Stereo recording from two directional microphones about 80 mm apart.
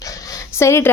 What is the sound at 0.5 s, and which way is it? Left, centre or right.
Speech, left.